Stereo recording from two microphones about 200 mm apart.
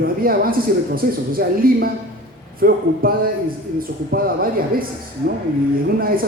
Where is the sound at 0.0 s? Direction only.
45° right (ahead or behind).